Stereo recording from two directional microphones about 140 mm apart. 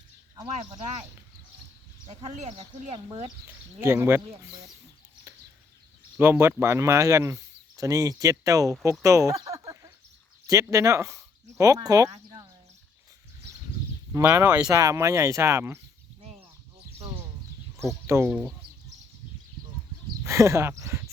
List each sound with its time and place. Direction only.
2.0 s speech: 55° right (ahead or behind)
3.4 s speech: 15° right (ahead or behind)
5.3 s chicken: 20° right (ahead or behind)
6.1 s speech: 15° right (ahead or behind)
9.4 s a sound: 25° right (ahead or behind)
10.4 s speech: 25° right (ahead or behind)
14.1 s speech: 15° right (ahead or behind)
14.7 s speech: 25° right (ahead or behind)
17.7 s speech: 20° right (ahead or behind)
18.3 s speech: 5° right (ahead or behind)
20.2 s speech: 20° right (ahead or behind)